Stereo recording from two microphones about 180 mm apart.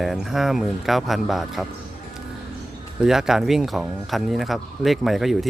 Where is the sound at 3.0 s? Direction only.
5° right (ahead or behind).